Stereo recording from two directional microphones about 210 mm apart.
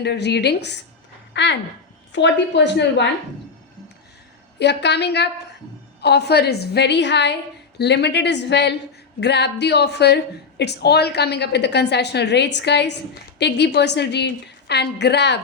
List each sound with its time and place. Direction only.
0.0 s a woman's voice: 55° left (ahead or behind)
4.6 s a woman's voice: 55° left (ahead or behind)